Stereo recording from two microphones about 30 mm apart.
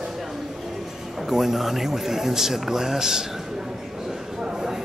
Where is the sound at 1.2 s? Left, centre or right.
Centre.